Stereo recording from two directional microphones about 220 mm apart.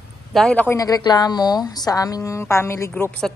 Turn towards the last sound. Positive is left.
turn(degrees=5)  # may be behind; listen again after turning